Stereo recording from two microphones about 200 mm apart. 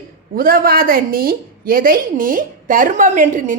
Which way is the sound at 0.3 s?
45° right (ahead or behind).